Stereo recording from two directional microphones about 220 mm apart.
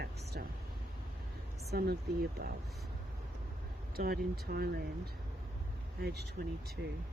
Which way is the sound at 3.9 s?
45° right (ahead or behind).